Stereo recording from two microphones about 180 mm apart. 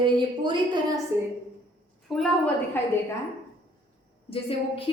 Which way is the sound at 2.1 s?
5° left (ahead or behind).